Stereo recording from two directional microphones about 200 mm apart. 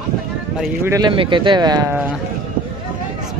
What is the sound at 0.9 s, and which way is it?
Speech, 20° right (ahead or behind).